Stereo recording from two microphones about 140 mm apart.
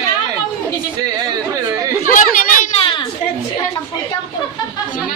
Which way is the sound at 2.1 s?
75° left (ahead or behind).